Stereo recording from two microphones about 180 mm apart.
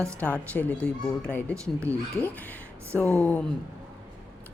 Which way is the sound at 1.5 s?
15° right (ahead or behind).